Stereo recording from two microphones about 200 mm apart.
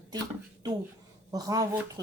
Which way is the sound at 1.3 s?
15° right (ahead or behind).